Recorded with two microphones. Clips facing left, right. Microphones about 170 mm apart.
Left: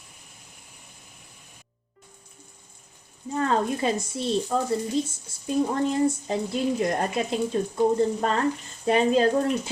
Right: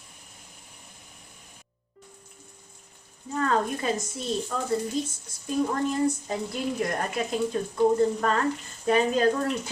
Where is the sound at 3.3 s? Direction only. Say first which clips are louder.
Left 1 dB; 25° left (ahead or behind).